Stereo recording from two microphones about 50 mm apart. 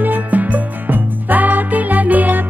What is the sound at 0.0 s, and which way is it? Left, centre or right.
Music, right.